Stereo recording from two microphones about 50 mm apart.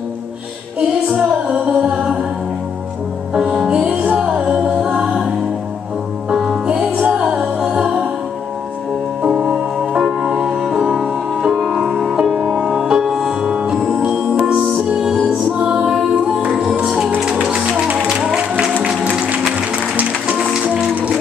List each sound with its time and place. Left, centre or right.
0.7 s music: centre
3.3 s music: centre
6.3 s music: centre
7.0 s music: right
7.3 s music: centre
9.2 s music: right
13.0 s music: centre
13.4 s music: centre
19.0 s music: right